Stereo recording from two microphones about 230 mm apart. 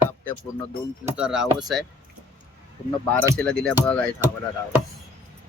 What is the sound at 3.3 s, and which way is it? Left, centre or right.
Speech, centre.